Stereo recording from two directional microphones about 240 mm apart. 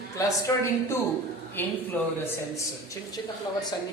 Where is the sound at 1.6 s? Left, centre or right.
Centre.